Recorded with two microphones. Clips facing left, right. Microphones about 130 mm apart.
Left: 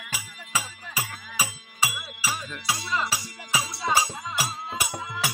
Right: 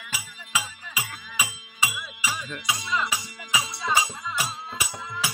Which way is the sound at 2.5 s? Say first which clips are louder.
Even; 5° left (ahead or behind).